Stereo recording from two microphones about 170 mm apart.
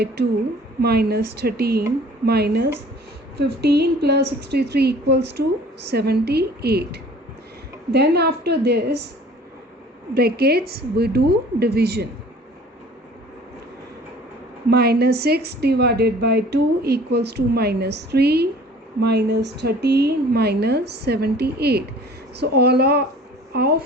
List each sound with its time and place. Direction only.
0.8 s a woman's voice: 70° right (ahead or behind)
10.2 s a woman's voice: 65° right (ahead or behind)
14.7 s a woman's voice: 70° right (ahead or behind)